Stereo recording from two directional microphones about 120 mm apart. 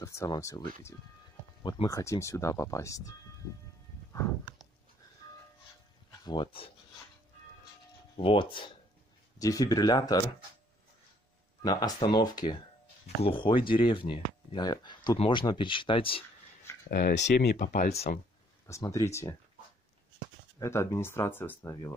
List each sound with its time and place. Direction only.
0.0 s speech: 25° left (ahead or behind)
1.6 s speech: 40° left (ahead or behind)
1.9 s speech: 25° left (ahead or behind)
5.2 s music: 30° left (ahead or behind)
6.2 s speech: 40° left (ahead or behind)
8.2 s speech: 50° left (ahead or behind)
9.4 s speech: 30° left (ahead or behind)
11.6 s speech: 35° left (ahead or behind)
17.1 s speech: 90° left; by 18.2 s 65° left (ahead or behind)
18.7 s speech: 25° left (ahead or behind)
20.5 s speech: 25° left (ahead or behind)